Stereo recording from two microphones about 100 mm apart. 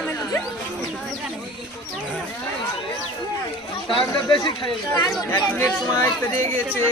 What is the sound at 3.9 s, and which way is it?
Speech, 60° left (ahead or behind).